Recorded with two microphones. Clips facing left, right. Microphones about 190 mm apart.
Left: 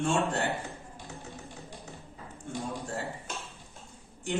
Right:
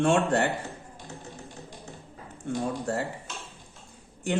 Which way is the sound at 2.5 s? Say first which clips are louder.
Right 7 dB; 65° right (ahead or behind).